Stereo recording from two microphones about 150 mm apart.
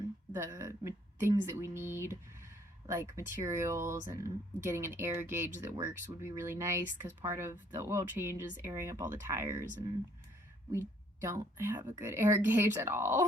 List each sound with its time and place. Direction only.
0.3 s a woman's voice: 20° right (ahead or behind)
10.7 s a woman's voice: 20° right (ahead or behind)